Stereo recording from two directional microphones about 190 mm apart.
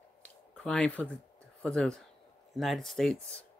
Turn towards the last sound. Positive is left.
turn(degrees=5)  # may be behind; listen again after turning